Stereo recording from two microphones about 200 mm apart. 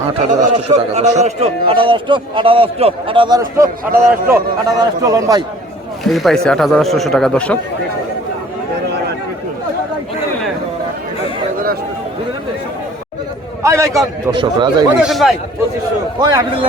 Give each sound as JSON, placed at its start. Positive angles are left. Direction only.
{"t": 0.2, "sound": "speech", "side_deg": -35}
{"t": 6.1, "sound": "a man's voice", "side_deg": 0}
{"t": 13.6, "sound": "a man's voice", "side_deg": -15}
{"t": 15.0, "sound": "a man's voice", "side_deg": 0}
{"t": 16.2, "sound": "speech", "side_deg": -20}